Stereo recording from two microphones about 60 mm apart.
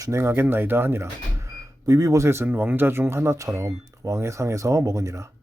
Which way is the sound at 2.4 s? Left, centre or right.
Right.